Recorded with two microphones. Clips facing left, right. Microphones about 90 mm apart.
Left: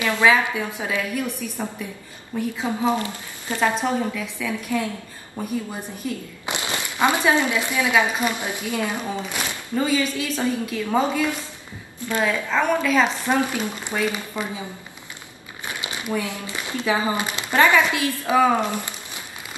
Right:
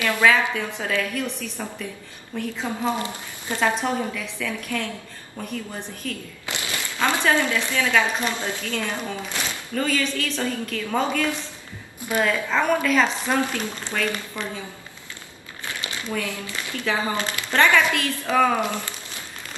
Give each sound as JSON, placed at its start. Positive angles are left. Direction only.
{"t": 0.0, "sound": "a woman's voice", "side_deg": 20}
{"t": 3.0, "sound": "speech", "side_deg": -20}
{"t": 3.8, "sound": "a woman's voice", "side_deg": 10}
{"t": 12.0, "sound": "a woman's voice", "side_deg": -15}
{"t": 12.3, "sound": "a woman's voice", "side_deg": 0}
{"t": 13.0, "sound": "a woman's voice", "side_deg": 15}
{"t": 15.6, "sound": "a woman's voice", "side_deg": 20}